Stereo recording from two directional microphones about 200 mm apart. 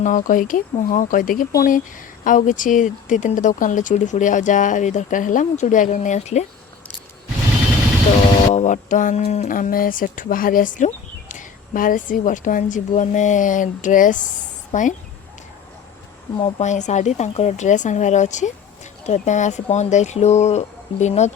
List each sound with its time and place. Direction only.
0.0 s speech: 40° left (ahead or behind)
8.5 s speech: 35° left (ahead or behind)
16.4 s speech: 35° left (ahead or behind)